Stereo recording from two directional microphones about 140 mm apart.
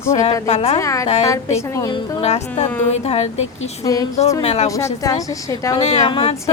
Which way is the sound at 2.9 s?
50° left (ahead or behind).